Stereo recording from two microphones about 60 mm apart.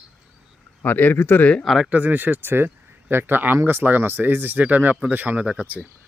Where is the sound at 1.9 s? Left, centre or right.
Right.